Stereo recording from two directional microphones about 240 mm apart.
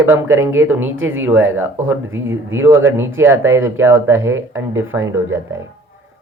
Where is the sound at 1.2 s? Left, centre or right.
Centre.